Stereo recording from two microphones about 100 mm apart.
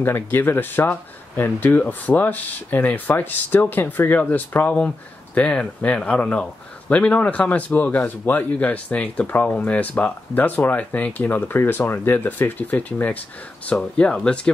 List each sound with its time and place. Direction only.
0.0 s speech: 20° left (ahead or behind)